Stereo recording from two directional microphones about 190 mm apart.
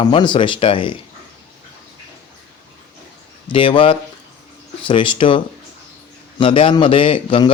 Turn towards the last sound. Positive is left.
turn(degrees=25)  # may be behind; listen again after turning